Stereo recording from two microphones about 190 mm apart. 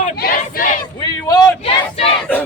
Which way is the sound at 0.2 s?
50° left (ahead or behind).